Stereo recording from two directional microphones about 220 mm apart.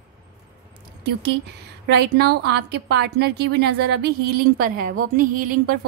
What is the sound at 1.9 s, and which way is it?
A woman's voice, 50° right (ahead or behind).